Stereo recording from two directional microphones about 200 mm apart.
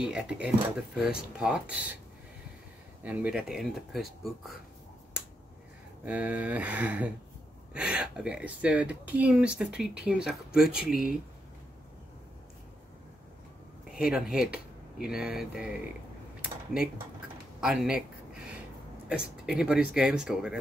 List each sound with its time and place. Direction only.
0.0 s speech: 5° right (ahead or behind)
3.0 s speech: 5° right (ahead or behind)
6.0 s speech: 5° right (ahead or behind)
13.9 s speech: 5° right (ahead or behind)
17.6 s speech: 5° right (ahead or behind)
19.0 s speech: 5° right (ahead or behind)